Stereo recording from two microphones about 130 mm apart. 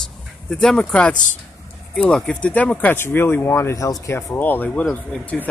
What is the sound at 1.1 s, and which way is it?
Speech, 80° left.